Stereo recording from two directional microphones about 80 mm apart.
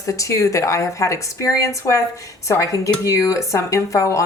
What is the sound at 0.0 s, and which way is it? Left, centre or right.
Speech, left.